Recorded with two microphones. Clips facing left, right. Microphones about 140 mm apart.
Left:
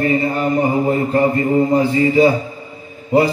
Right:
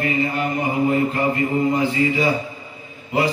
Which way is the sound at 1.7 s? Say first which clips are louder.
Left 6 dB; 40° left (ahead or behind).